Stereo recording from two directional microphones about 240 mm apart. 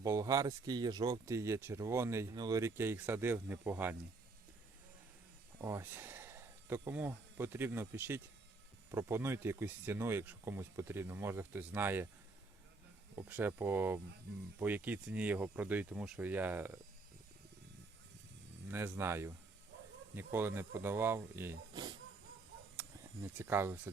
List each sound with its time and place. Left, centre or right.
0.0 s speech: centre
5.5 s speech: centre
13.1 s speech: centre
18.7 s speech: centre